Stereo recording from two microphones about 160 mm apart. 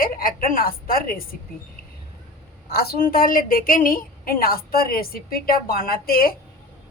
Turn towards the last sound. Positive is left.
turn(degrees=65)  # may be behind; listen again after turning